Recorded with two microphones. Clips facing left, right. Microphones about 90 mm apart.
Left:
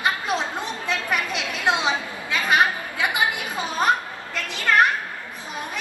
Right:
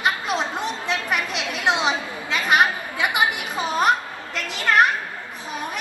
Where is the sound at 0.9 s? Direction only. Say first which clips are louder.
Left 1 dB; 20° right (ahead or behind).